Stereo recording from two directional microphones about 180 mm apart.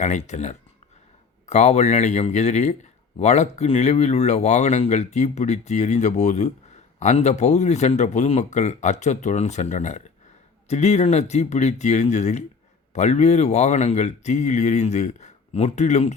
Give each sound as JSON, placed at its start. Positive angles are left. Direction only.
{"t": 0.0, "sound": "speech", "side_deg": 40}